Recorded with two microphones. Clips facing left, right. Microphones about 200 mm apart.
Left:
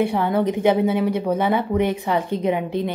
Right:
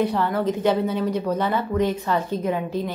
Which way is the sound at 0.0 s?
15° left (ahead or behind).